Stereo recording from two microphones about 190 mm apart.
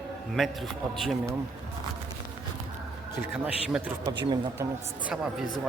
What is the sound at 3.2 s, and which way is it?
Speech, 5° right (ahead or behind).